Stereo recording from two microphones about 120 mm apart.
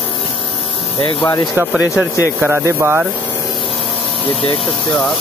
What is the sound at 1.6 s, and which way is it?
Speech, 15° right (ahead or behind).